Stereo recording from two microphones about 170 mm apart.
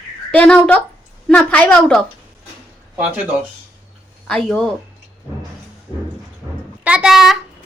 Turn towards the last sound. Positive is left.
turn(degrees=0)  # may be behind; listen again after turning